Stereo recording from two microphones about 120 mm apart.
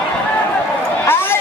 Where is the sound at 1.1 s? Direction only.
20° left (ahead or behind).